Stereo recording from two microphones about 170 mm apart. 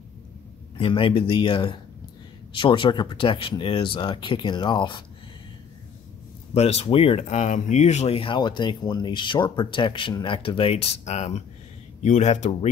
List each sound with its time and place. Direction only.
0.7 s speech: 30° left (ahead or behind)
6.5 s speech: 40° left (ahead or behind)